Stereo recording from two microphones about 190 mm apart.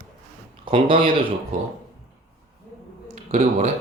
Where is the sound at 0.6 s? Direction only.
25° right (ahead or behind).